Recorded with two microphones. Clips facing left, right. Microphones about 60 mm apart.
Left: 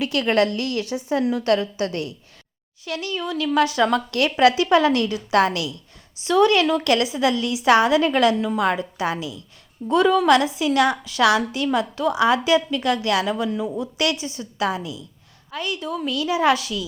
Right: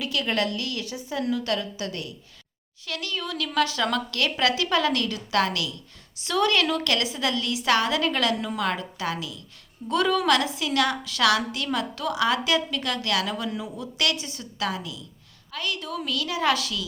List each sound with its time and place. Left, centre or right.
0.0 s a woman's voice: left
2.8 s speech: centre
6.2 s a woman's voice: centre
9.9 s a woman's voice: centre
13.5 s a woman's voice: centre
14.6 s a woman's voice: left